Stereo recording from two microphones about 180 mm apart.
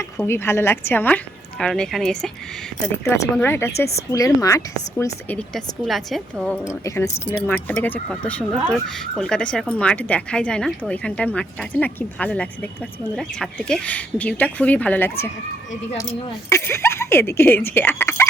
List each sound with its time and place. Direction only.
0.2 s speech: 15° left (ahead or behind)
3.4 s speech: 15° left (ahead or behind)
5.5 s a woman's voice: centre (ahead or behind)
6.8 s speech: 15° left (ahead or behind)
16.5 s speech: 15° left (ahead or behind)